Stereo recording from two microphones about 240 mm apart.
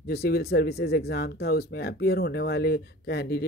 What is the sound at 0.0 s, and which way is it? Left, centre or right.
Speech, left.